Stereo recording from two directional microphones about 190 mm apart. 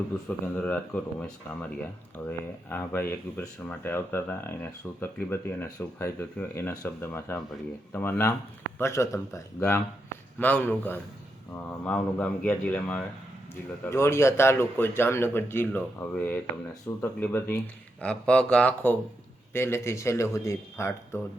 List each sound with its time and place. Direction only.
0.3 s a man's voice: 10° left (ahead or behind)
2.6 s a man's voice: 10° left (ahead or behind)